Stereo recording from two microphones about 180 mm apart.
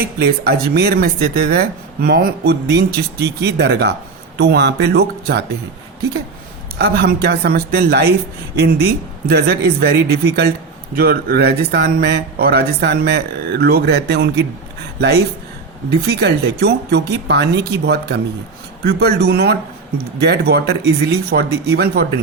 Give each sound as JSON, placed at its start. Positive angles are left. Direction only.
{"t": 0.0, "sound": "speech", "side_deg": -60}
{"t": 6.7, "sound": "speech", "side_deg": -65}
{"t": 16.0, "sound": "speech", "side_deg": -65}